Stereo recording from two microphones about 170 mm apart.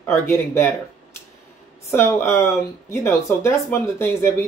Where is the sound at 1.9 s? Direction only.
15° left (ahead or behind).